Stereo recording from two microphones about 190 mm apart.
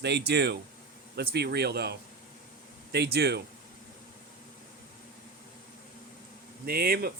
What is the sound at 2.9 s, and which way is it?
Speech, 60° right (ahead or behind).